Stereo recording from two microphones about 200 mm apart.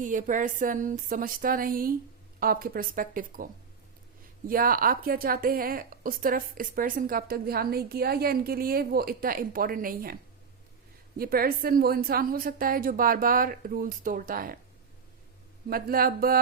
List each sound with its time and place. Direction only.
0.0 s a woman's voice: 40° right (ahead or behind)
11.2 s a woman's voice: 50° right (ahead or behind)
15.7 s a woman's voice: 50° right (ahead or behind)